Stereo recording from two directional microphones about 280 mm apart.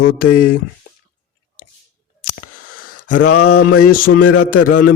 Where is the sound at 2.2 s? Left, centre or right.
Left.